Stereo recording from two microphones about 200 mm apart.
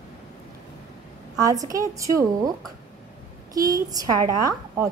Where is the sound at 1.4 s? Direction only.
15° right (ahead or behind).